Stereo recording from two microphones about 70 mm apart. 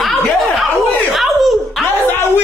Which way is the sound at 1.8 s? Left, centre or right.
Left.